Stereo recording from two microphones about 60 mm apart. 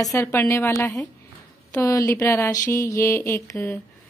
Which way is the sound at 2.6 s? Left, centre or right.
Left.